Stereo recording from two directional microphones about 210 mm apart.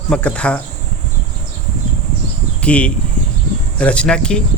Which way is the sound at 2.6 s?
5° left (ahead or behind).